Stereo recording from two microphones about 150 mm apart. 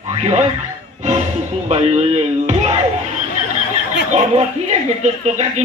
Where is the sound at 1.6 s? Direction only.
45° right (ahead or behind).